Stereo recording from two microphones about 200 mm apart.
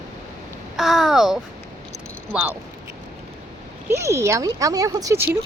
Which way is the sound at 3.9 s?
15° right (ahead or behind).